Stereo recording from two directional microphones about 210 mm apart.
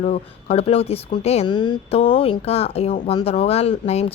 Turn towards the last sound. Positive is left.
turn(degrees=30)  # may be behind; listen again after turning